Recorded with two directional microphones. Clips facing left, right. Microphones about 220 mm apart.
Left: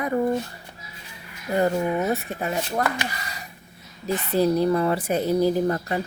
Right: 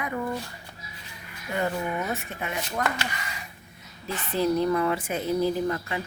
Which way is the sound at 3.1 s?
35° left (ahead or behind).